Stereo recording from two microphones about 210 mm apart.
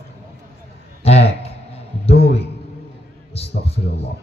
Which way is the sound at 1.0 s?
30° left (ahead or behind).